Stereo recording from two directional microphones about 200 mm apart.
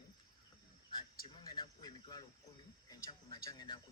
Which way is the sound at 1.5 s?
20° left (ahead or behind).